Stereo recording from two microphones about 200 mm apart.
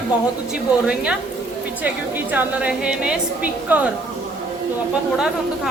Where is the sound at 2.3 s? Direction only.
5° right (ahead or behind).